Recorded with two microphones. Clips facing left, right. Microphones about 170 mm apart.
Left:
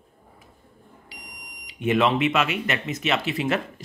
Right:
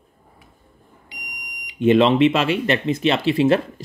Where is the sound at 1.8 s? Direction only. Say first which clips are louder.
Right 7 dB; 30° right (ahead or behind).